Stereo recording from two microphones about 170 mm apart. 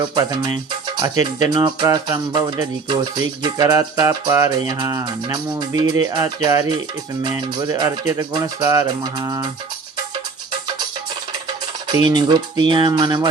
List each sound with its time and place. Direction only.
0.1 s speech: 25° right (ahead or behind)
11.9 s speech: 25° right (ahead or behind)